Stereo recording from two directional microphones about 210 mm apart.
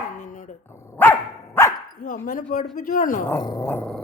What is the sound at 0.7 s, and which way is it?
Dog, 10° left (ahead or behind).